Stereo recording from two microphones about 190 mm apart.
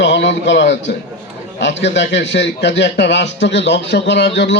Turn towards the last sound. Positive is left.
turn(degrees=70)  # may be behind; listen again after turning